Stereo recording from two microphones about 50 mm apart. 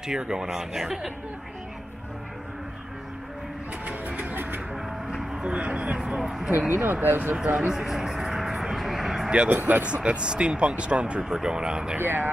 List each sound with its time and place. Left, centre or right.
0.0 s speech: centre
3.8 s speech: right
5.1 s speech: centre
6.7 s speech: right
7.4 s speech: centre
8.7 s vehicle: centre
9.5 s speech: right
9.8 s speech: right
12.0 s speech: right